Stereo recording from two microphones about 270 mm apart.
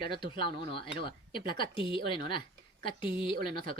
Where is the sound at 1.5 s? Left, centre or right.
Centre.